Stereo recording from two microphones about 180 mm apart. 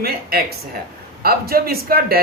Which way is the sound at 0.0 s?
60° right (ahead or behind).